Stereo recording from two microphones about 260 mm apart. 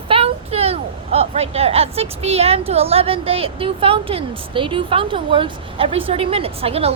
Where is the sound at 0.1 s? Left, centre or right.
Right.